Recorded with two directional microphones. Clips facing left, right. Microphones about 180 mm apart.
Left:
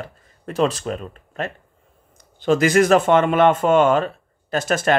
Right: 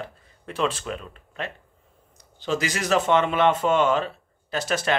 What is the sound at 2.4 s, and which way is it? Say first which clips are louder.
Speech: left 11 dB; 55° left (ahead or behind).